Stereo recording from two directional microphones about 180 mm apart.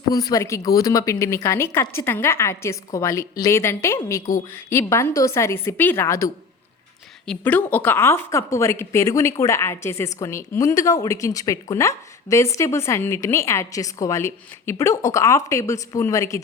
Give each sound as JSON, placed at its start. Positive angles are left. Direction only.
{"t": 0.1, "sound": "a woman's voice", "side_deg": 20}